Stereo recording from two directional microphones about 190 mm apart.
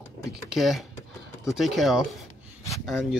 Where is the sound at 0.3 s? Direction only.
Centre (ahead or behind).